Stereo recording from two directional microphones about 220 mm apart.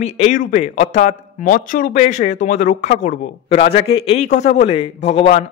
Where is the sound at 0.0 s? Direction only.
35° left (ahead or behind).